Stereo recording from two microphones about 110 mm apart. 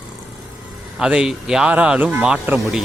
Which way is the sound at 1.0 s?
5° right (ahead or behind).